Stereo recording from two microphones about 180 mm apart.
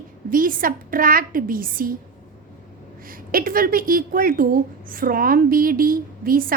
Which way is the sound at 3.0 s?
50° right (ahead or behind).